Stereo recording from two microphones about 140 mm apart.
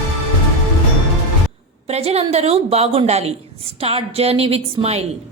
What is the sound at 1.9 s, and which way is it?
A woman's voice, 45° right (ahead or behind).